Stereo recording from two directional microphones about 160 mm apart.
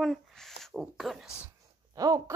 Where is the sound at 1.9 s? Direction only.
25° right (ahead or behind).